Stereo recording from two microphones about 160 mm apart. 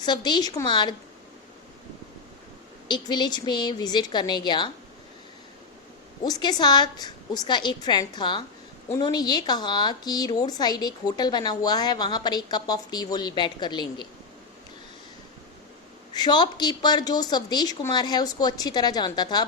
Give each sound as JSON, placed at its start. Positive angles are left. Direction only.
{"t": 0.0, "sound": "a woman's voice", "side_deg": 25}
{"t": 2.8, "sound": "a woman's voice", "side_deg": 30}
{"t": 6.2, "sound": "a woman's voice", "side_deg": 25}
{"t": 16.1, "sound": "a woman's voice", "side_deg": 25}